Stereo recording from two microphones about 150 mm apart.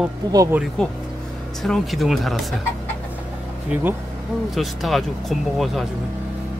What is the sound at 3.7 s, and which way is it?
Speech, 10° right (ahead or behind).